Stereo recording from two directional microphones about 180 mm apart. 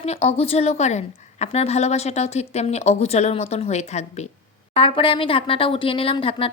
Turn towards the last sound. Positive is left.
turn(degrees=30)  # may be behind; listen again after turning